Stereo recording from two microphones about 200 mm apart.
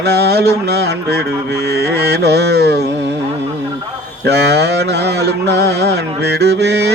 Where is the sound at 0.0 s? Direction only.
55° right (ahead or behind).